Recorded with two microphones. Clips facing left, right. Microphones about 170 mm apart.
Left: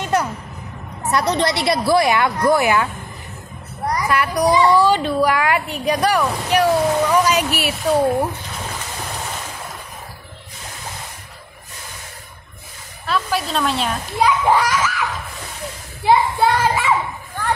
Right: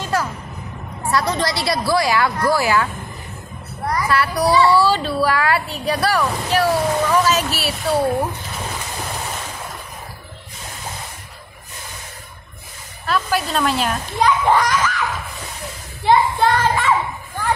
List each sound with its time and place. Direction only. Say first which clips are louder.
0.0 s a sound: left 2 dB; 20° left (ahead or behind)
1.0 s a woman's voice: left 2 dB; 20° left (ahead or behind)
13.0 s a child's voice: right 1 dB; centre (ahead or behind)
16.0 s a child's voice: even; 10° left (ahead or behind)